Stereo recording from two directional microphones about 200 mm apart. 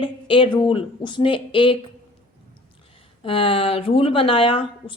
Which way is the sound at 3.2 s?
30° left (ahead or behind).